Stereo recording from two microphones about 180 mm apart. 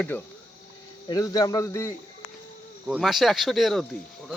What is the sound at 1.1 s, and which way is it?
Speech, 20° left (ahead or behind).